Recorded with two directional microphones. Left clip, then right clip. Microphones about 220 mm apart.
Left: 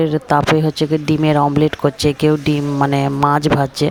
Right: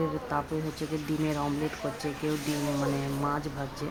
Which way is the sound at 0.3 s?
40° left (ahead or behind).